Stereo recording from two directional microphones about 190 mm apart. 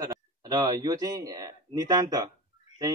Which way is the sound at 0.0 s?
20° right (ahead or behind).